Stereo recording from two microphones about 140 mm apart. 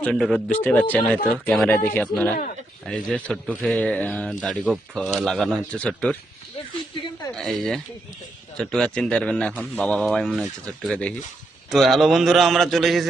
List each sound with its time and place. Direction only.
0.0 s speech: centre (ahead or behind)
4.4 s speech: 5° right (ahead or behind)
6.9 s a sound: 35° left (ahead or behind)
7.3 s speech: centre (ahead or behind)